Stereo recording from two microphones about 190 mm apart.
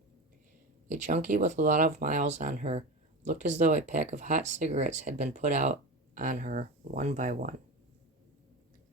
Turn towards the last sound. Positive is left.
turn(degrees=-40)  # may be behind; listen again after turning